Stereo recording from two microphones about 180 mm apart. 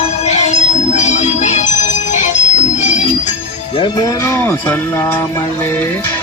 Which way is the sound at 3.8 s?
25° left (ahead or behind).